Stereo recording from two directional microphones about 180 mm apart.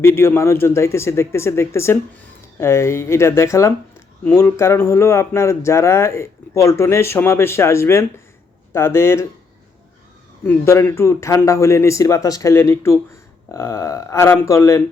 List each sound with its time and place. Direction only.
0.0 s speech: 15° left (ahead or behind)
10.4 s speech: 10° left (ahead or behind)